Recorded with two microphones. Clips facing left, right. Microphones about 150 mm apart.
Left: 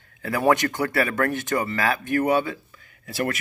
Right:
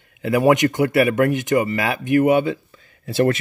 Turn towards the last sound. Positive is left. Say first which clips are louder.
# right 9 dB
turn(degrees=-25)  # may be behind; listen again after turning